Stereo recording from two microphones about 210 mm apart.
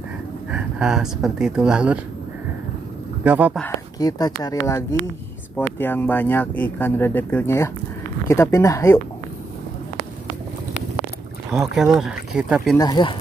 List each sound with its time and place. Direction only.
0.5 s speech: 5° right (ahead or behind)
3.3 s speech: 5° right (ahead or behind)
3.6 s speech: 15° left (ahead or behind)
11.7 s speech: centre (ahead or behind)
12.7 s speech: 20° left (ahead or behind)